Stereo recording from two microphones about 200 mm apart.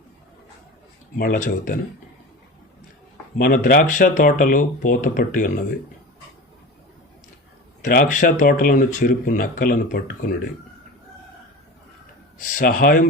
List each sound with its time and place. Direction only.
1.2 s speech: 45° left (ahead or behind)
3.3 s speech: 45° left (ahead or behind)
7.9 s speech: 45° left (ahead or behind)
12.5 s speech: 40° left (ahead or behind)